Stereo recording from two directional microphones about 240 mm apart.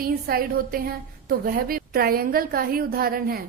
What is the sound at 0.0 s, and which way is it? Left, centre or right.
A woman's voice, right.